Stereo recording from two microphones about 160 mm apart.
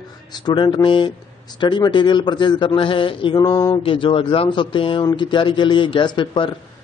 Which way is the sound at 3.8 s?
35° left (ahead or behind).